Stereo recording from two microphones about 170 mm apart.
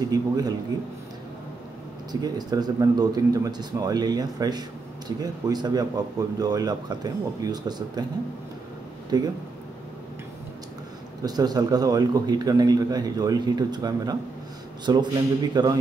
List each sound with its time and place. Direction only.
0.1 s speech: 20° right (ahead or behind)
2.2 s speech: 25° right (ahead or behind)
9.1 s speech: 25° right (ahead or behind)
11.2 s speech: 25° right (ahead or behind)